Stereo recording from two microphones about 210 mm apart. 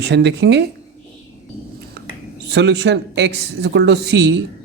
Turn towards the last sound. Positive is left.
turn(degrees=-55)  # may be behind; listen again after turning